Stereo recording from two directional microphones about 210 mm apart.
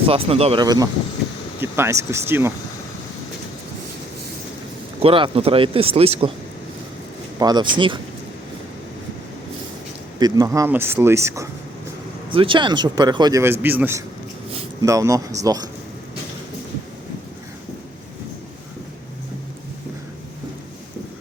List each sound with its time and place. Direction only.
0.1 s a man's voice: 30° right (ahead or behind); by 2.5 s 10° right (ahead or behind)
5.0 s a man's voice: 25° right (ahead or behind)
7.3 s a man's voice: 20° right (ahead or behind)
10.2 s speech: 20° right (ahead or behind)
12.3 s a man's voice: 25° right (ahead or behind)